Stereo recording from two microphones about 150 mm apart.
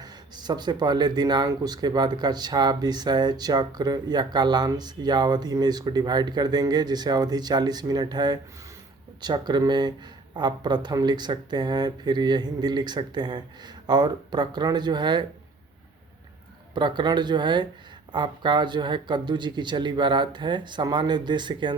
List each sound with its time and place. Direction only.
0.0 s speech: 30° right (ahead or behind)
16.7 s speech: 30° right (ahead or behind)